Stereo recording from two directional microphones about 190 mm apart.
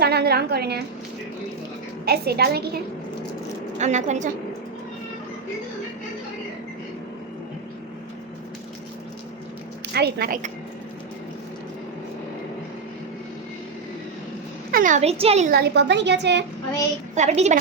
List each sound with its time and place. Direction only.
0.0 s a woman's voice: 55° right (ahead or behind)
2.0 s a woman's voice: 55° right (ahead or behind)
3.8 s a woman's voice: 40° right (ahead or behind)
9.9 s a woman's voice: 55° right (ahead or behind)
14.7 s speech: 45° right (ahead or behind)
15.4 s a woman's voice: 60° right (ahead or behind)
17.2 s a woman's voice: 35° right (ahead or behind)